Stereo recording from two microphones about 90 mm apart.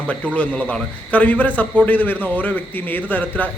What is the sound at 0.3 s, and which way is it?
A man's voice, 15° left (ahead or behind).